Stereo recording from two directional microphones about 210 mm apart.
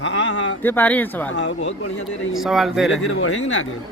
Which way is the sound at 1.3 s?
60° left (ahead or behind).